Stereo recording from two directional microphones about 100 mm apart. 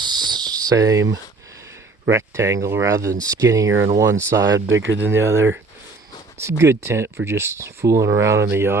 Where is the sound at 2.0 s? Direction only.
30° right (ahead or behind).